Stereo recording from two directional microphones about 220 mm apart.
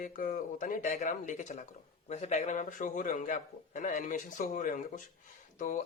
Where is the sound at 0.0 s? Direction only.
35° left (ahead or behind).